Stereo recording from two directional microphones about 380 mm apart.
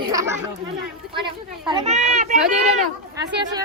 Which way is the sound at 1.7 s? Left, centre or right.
Centre.